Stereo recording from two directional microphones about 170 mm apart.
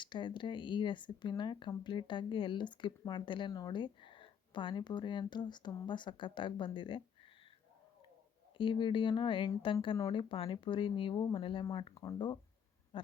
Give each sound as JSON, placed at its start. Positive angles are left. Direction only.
{"t": 0.0, "sound": "speech", "side_deg": 30}
{"t": 8.5, "sound": "speech", "side_deg": 30}
{"t": 12.9, "sound": "a sound", "side_deg": 30}